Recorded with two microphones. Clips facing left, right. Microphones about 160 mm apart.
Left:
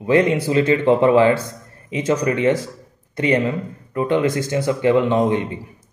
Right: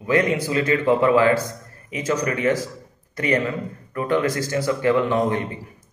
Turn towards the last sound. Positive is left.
turn(degrees=20)  # may be behind; listen again after turning